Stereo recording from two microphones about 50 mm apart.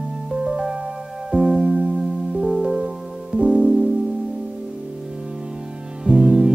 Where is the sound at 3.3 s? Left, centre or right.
Right.